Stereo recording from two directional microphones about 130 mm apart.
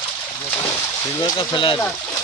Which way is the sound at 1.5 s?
40° left (ahead or behind).